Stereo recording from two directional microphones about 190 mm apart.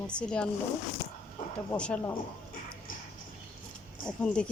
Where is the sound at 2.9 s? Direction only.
45° left (ahead or behind).